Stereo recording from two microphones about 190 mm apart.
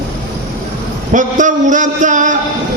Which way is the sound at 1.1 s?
40° right (ahead or behind).